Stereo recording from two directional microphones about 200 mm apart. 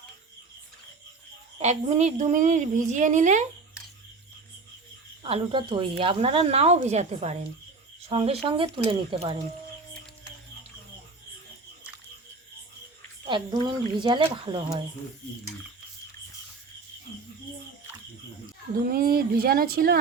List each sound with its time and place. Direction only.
1.5 s a woman's voice: 30° right (ahead or behind)
5.2 s a woman's voice: 25° right (ahead or behind)
13.2 s speech: 25° right (ahead or behind)
18.9 s speech: 45° right (ahead or behind)